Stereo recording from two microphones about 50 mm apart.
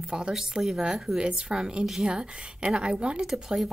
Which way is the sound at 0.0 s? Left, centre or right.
Centre.